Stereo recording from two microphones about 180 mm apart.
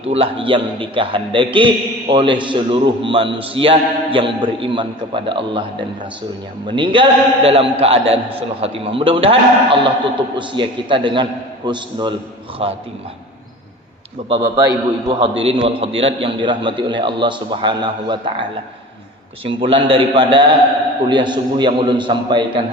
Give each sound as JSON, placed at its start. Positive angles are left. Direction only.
{"t": 0.0, "sound": "a man's voice", "side_deg": -35}
{"t": 6.7, "sound": "a man's voice", "side_deg": -25}
{"t": 14.2, "sound": "a man's voice", "side_deg": -30}
{"t": 19.5, "sound": "a man's voice", "side_deg": -30}